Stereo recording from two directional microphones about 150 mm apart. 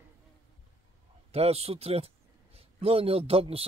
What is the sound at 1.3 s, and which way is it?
A man's voice, 45° right (ahead or behind).